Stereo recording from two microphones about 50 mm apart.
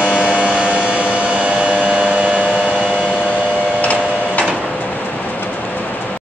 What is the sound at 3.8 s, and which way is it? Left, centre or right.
Tick-tock, left.